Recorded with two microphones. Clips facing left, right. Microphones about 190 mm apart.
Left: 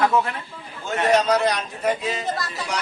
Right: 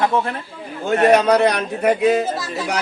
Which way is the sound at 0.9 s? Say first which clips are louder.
Right 5 dB; 60° right (ahead or behind).